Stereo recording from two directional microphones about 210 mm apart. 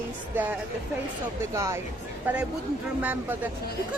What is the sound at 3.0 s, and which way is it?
Speech, 10° right (ahead or behind).